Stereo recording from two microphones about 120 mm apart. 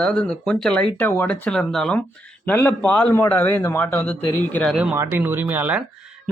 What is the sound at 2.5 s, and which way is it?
Speech, 15° left (ahead or behind).